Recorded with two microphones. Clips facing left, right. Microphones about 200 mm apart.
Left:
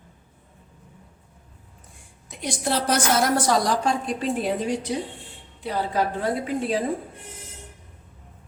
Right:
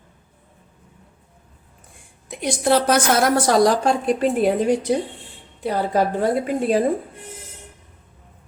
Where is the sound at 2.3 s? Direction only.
65° right (ahead or behind).